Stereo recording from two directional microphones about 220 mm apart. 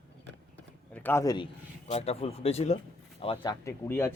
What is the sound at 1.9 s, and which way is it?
A man's voice, 30° left (ahead or behind).